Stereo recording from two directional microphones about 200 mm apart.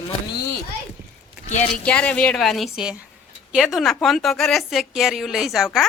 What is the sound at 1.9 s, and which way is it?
Speech, 5° left (ahead or behind).